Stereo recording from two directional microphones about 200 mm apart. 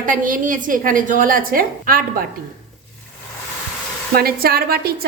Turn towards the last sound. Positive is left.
turn(degrees=-50)  # may be behind; listen again after turning